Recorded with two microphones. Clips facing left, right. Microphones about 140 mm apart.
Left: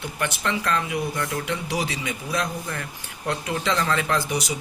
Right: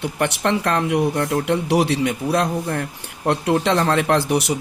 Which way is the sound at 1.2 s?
55° right (ahead or behind).